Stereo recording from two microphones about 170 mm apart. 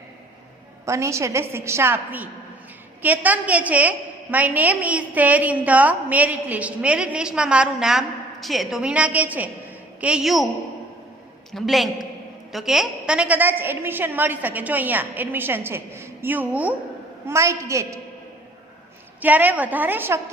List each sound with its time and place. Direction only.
0.9 s a woman's voice: 15° right (ahead or behind); by 10.5 s centre (ahead or behind)
11.5 s a woman's voice: centre (ahead or behind); by 18.0 s 15° right (ahead or behind)
19.2 s a woman's voice: 10° right (ahead or behind)